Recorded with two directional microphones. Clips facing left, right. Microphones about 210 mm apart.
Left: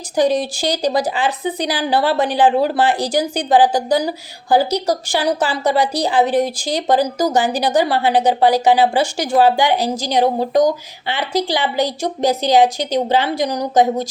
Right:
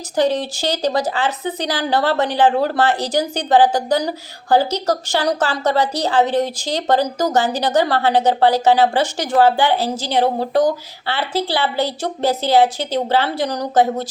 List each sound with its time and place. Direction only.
0.2 s speech: 15° left (ahead or behind)